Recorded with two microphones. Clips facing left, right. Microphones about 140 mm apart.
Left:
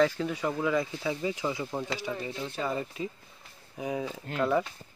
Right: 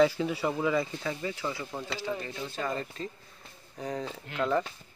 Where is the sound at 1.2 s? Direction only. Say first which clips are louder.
Left 3 dB; 15° left (ahead or behind).